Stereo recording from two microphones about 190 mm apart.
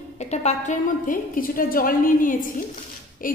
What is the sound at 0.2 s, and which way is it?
A woman's voice, 35° left (ahead or behind).